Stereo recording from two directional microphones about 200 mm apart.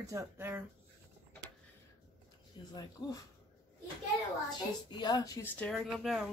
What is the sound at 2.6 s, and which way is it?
Speech, 25° left (ahead or behind).